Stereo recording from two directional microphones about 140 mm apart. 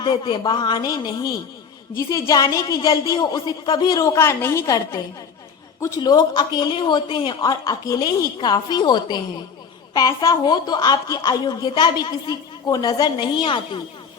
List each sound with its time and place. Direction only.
0.0 s a woman's voice: 35° left (ahead or behind); by 4.6 s 20° left (ahead or behind)
4.6 s a woman's voice: 30° left (ahead or behind)